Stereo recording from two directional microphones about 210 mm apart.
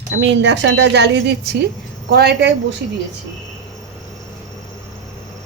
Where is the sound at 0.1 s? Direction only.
55° right (ahead or behind).